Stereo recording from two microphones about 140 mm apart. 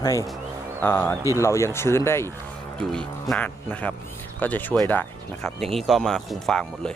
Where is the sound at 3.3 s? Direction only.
10° left (ahead or behind).